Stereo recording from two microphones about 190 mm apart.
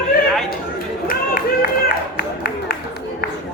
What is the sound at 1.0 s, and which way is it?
Run, 50° left (ahead or behind).